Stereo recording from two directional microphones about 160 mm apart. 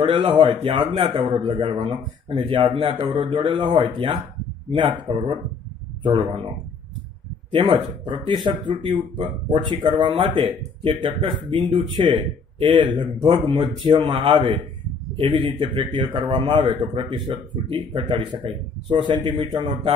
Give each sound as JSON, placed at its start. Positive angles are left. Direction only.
{"t": 0.0, "sound": "a man's voice", "side_deg": -30}
{"t": 7.5, "sound": "a man's voice", "side_deg": -30}